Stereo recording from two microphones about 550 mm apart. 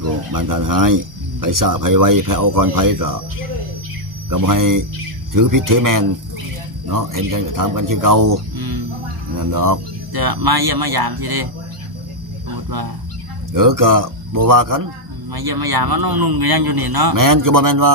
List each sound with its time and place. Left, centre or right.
0.3 s speech: right
4.3 s speech: right
13.5 s speech: right